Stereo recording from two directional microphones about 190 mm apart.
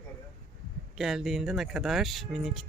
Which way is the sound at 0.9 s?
Centre (ahead or behind).